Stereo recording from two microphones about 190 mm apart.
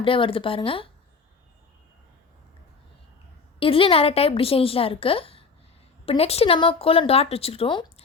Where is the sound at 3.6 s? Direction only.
30° left (ahead or behind).